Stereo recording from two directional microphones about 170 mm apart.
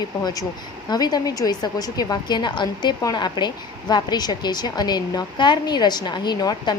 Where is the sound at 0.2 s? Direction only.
25° left (ahead or behind).